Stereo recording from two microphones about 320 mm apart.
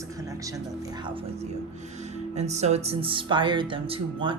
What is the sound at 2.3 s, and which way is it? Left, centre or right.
Speech, right.